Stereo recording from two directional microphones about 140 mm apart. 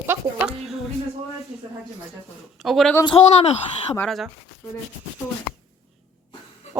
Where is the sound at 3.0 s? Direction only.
40° left (ahead or behind).